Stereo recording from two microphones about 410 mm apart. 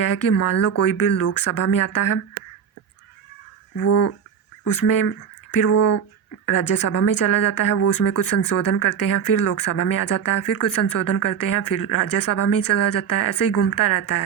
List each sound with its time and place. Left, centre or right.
0.0 s speech: left
3.8 s speech: left
4.7 s speech: left